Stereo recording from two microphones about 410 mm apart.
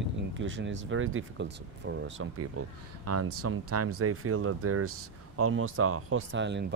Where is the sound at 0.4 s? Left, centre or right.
Right.